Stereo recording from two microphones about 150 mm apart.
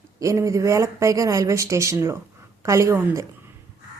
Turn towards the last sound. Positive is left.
turn(degrees=-20)  # may be behind; listen again after turning